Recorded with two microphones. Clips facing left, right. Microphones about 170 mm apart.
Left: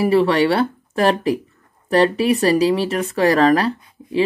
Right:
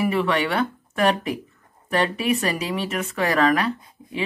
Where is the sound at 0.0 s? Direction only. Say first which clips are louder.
Left 7 dB; 35° left (ahead or behind).